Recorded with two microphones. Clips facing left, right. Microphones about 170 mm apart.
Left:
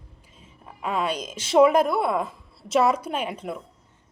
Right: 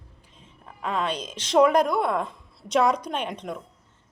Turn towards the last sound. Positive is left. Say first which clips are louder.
# left 1 dB
turn(degrees=5)  # may be behind; listen again after turning